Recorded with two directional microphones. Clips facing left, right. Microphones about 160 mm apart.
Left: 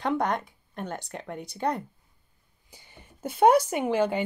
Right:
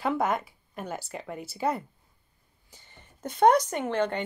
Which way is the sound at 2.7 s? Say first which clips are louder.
Left 3 dB; 10° left (ahead or behind).